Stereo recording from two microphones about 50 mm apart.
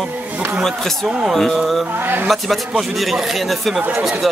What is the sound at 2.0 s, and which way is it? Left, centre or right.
Speech, right.